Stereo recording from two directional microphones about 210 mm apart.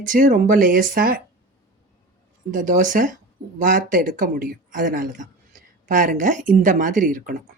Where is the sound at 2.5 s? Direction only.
40° right (ahead or behind).